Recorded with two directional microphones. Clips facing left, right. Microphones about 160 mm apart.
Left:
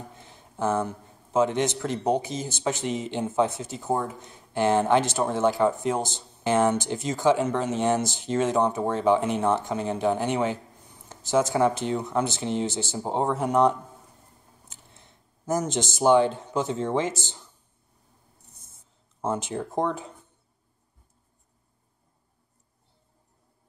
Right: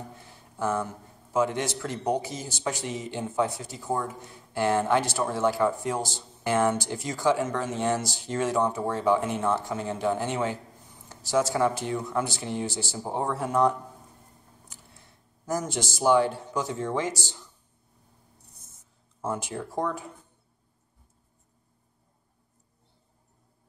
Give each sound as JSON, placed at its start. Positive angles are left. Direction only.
{"t": 0.2, "sound": "a man's voice", "side_deg": 20}
{"t": 19.2, "sound": "a man's voice", "side_deg": 20}